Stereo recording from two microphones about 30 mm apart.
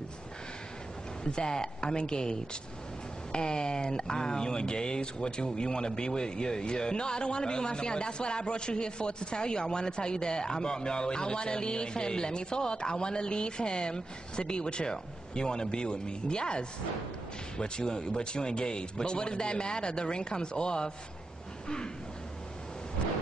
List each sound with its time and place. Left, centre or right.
1.2 s speech: left